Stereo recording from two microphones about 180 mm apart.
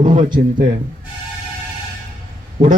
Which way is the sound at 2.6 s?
30° right (ahead or behind).